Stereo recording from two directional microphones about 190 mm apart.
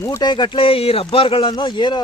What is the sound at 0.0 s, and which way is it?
Speech, 20° left (ahead or behind).